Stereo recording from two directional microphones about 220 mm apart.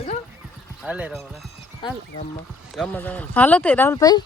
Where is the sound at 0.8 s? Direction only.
5° right (ahead or behind).